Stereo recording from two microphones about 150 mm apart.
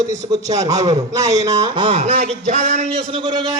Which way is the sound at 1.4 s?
30° right (ahead or behind).